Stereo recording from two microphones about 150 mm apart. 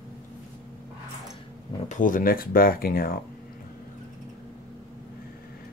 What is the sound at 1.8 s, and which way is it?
Speech, 60° left (ahead or behind).